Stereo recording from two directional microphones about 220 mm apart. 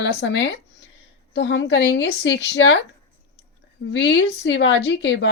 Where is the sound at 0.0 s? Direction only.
55° left (ahead or behind).